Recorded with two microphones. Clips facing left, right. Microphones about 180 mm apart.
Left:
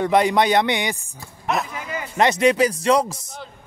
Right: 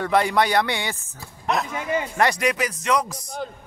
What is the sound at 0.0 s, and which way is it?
Speech, 20° left (ahead or behind).